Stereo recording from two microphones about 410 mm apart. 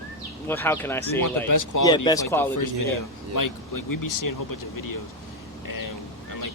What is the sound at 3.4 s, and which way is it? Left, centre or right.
Speech, left.